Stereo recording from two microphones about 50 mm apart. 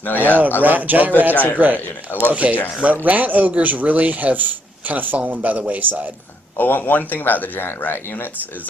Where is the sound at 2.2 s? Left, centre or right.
Right.